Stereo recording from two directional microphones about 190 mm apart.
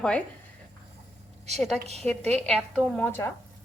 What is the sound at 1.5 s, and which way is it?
A woman's voice, centre (ahead or behind).